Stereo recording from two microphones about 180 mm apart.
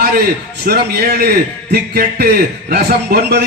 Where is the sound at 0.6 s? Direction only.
60° right (ahead or behind).